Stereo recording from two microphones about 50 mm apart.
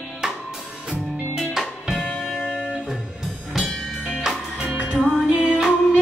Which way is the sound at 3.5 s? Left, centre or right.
Centre.